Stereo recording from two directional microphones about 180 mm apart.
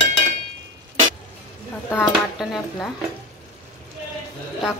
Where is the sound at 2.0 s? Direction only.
Centre (ahead or behind).